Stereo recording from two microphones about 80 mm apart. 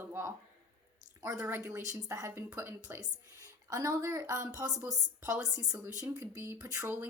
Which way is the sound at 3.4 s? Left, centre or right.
Right.